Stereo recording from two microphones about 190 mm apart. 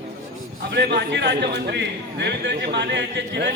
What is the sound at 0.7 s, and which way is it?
A man's voice, 60° right (ahead or behind).